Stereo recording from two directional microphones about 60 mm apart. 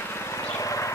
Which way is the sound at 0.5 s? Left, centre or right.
Left.